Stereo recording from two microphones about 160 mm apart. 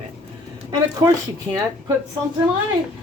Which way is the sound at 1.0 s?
25° right (ahead or behind).